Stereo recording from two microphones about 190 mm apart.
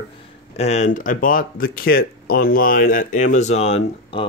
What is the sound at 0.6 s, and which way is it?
Speech, 35° left (ahead or behind).